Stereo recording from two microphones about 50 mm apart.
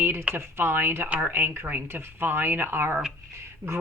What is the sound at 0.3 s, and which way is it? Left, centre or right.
Speech, right.